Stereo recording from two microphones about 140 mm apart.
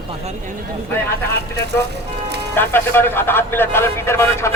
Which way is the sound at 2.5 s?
15° left (ahead or behind).